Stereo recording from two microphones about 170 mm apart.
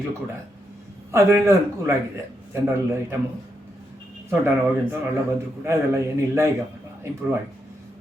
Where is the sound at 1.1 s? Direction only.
15° right (ahead or behind).